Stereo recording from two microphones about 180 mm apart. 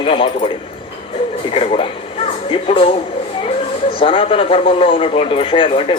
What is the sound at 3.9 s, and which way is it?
A man's voice, 30° left (ahead or behind).